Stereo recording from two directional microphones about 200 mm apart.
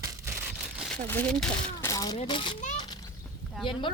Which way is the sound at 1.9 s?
15° left (ahead or behind).